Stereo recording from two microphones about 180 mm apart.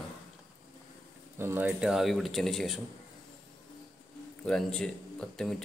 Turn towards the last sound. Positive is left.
turn(degrees=5)  # may be behind; listen again after turning